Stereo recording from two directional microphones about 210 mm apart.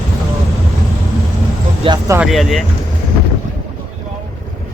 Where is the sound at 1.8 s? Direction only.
20° right (ahead or behind).